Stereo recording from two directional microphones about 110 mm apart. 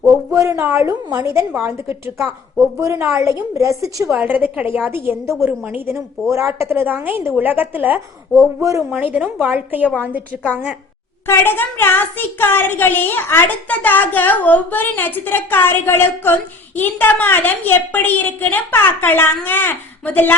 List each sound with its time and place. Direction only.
0.0 s a sound: 25° right (ahead or behind)
0.6 s a woman's voice: 20° right (ahead or behind)
4.2 s a woman's voice: 15° right (ahead or behind)
11.3 s a woman's voice: 20° left (ahead or behind)